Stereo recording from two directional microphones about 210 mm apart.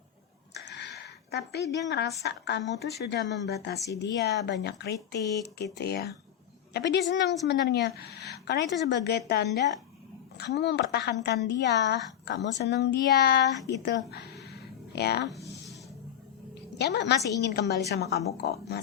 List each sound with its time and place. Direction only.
0.5 s a woman's voice: 55° left (ahead or behind)
16.7 s a woman's voice: 55° left (ahead or behind)